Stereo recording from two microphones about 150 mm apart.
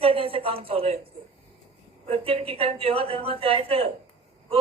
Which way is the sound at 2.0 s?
40° right (ahead or behind).